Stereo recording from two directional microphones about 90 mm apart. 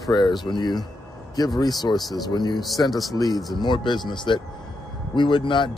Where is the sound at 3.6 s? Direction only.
60° left (ahead or behind).